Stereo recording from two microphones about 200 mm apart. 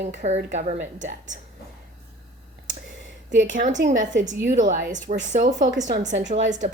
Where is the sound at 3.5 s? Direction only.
40° right (ahead or behind).